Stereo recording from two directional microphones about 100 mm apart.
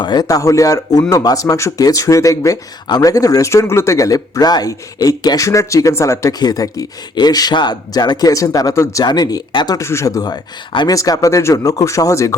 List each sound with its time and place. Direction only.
0.0 s speech: 45° left (ahead or behind)
9.7 s speech: 30° left (ahead or behind); by 10.9 s 45° left (ahead or behind)
10.9 s speech: 35° left (ahead or behind)